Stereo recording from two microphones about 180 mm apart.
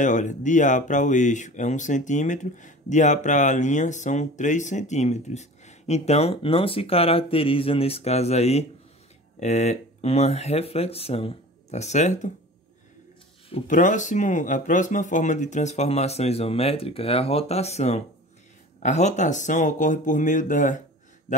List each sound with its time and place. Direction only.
0.0 s speech: 45° left (ahead or behind)
13.7 s speech: 45° left (ahead or behind)